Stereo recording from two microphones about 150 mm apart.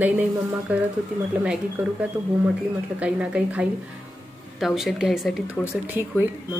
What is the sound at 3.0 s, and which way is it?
A woman's voice, 10° right (ahead or behind).